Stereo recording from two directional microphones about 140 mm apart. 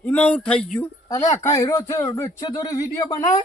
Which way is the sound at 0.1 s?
10° left (ahead or behind).